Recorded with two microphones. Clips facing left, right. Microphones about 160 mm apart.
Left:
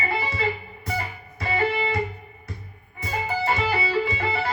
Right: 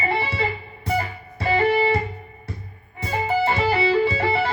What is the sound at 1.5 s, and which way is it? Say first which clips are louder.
Music: right 5 dB; 30° right (ahead or behind).